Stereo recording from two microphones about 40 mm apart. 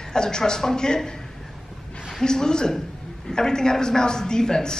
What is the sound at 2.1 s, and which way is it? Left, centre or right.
A man's voice, centre.